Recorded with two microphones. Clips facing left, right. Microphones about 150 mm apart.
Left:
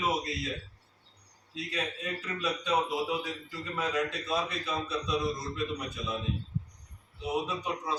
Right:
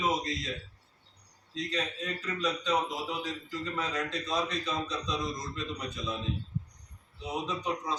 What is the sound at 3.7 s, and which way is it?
A man's voice, 10° left (ahead or behind).